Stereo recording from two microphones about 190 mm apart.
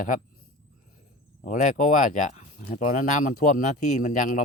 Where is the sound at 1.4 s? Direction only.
40° left (ahead or behind).